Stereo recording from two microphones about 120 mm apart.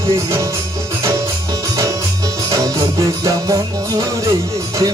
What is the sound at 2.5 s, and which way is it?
Music, 30° right (ahead or behind).